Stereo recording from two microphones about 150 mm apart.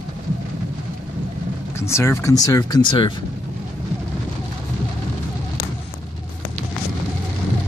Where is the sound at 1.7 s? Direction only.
20° left (ahead or behind).